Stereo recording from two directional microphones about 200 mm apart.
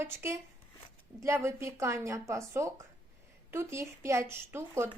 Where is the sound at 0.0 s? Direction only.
10° right (ahead or behind).